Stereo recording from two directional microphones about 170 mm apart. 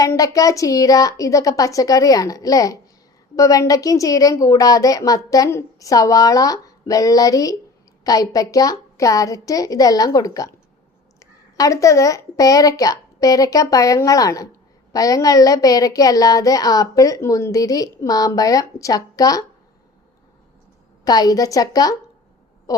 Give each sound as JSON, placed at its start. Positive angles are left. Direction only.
{"t": 0.0, "sound": "a woman's voice", "side_deg": 20}
{"t": 21.0, "sound": "a woman's voice", "side_deg": 20}